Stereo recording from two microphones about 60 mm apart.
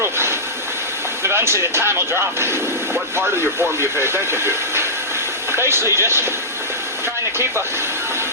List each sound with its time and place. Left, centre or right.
0.0 s vehicle: right
1.2 s speech: right